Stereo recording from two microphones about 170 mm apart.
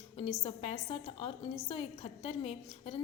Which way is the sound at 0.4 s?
35° left (ahead or behind).